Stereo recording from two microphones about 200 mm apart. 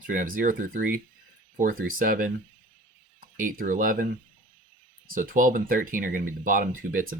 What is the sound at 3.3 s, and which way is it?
Speech, 45° right (ahead or behind).